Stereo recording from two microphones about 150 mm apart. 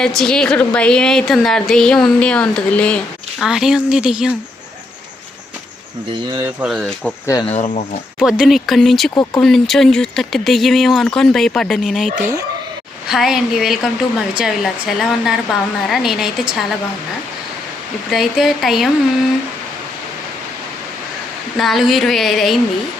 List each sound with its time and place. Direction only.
0.2 s speech: 5° left (ahead or behind)
3.4 s speech: 5° right (ahead or behind)
6.2 s speech: 25° right (ahead or behind)
6.6 s speech: centre (ahead or behind)
7.4 s speech: 45° left (ahead or behind)
8.2 s speech: 5° right (ahead or behind)
18.1 s speech: centre (ahead or behind)
21.6 s speech: centre (ahead or behind)